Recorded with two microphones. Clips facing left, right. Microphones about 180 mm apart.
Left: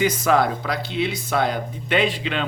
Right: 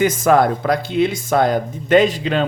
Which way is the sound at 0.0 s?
50° right (ahead or behind).